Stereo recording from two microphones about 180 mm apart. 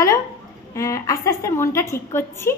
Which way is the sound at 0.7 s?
15° left (ahead or behind).